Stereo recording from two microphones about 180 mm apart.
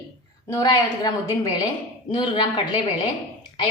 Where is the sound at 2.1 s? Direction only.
30° left (ahead or behind).